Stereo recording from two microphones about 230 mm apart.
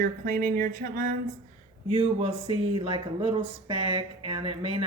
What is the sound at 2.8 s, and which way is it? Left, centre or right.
Speech, right.